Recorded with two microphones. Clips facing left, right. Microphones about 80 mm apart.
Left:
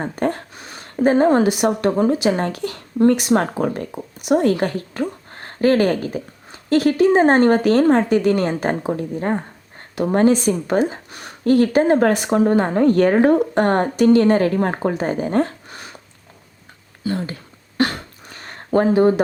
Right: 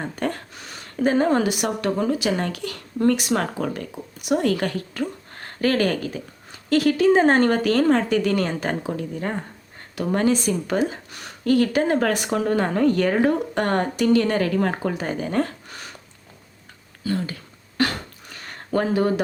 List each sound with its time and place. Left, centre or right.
0.0 s a woman's voice: left
12.9 s a woman's voice: left
17.0 s speech: left
17.7 s a sound: left